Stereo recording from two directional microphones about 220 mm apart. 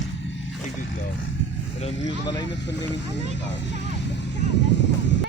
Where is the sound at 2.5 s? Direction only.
55° left (ahead or behind).